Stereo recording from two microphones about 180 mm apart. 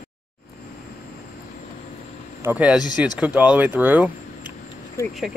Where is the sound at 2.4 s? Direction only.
10° right (ahead or behind).